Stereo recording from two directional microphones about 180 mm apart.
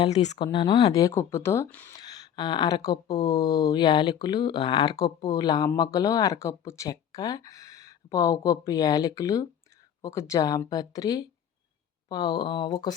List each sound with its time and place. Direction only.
0.0 s speech: 40° left (ahead or behind)
0.4 s speech: 25° left (ahead or behind)